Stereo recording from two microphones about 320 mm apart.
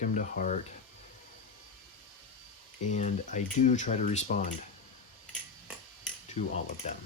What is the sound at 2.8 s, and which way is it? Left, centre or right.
Speech, left.